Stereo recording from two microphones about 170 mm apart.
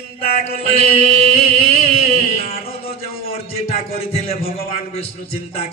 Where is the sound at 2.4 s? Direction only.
35° left (ahead or behind).